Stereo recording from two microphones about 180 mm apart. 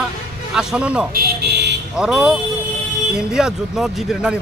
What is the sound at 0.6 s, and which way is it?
Speech, 5° right (ahead or behind).